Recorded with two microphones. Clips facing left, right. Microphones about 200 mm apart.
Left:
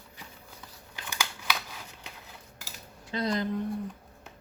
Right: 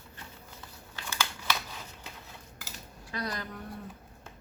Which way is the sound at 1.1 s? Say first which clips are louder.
Even; 15° left (ahead or behind).